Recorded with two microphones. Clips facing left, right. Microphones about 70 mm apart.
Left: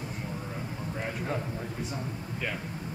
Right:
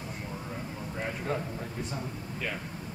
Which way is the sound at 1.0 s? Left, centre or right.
Centre.